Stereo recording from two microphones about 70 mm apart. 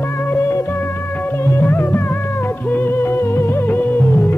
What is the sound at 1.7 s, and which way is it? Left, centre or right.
Music, left.